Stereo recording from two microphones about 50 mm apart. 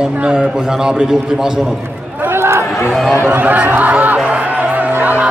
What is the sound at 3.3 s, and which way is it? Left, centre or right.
Speech, right.